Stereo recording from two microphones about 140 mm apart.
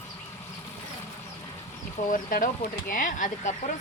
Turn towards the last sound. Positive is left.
turn(degrees=70)  # may be behind; listen again after turning